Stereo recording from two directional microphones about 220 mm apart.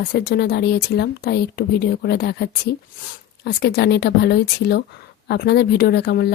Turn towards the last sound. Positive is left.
turn(degrees=45)  # may be behind; listen again after turning